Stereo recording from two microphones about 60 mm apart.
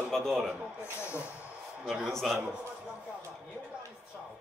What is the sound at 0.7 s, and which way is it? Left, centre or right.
Speech, left.